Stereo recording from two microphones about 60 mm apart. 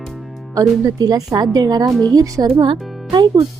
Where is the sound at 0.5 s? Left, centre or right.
Right.